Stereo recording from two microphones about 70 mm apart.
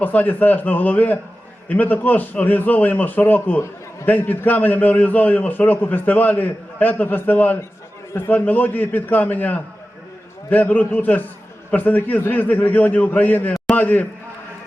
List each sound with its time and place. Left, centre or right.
0.0 s a man's voice: left